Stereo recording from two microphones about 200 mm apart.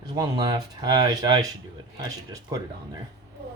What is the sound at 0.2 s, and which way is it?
Speech, 20° right (ahead or behind).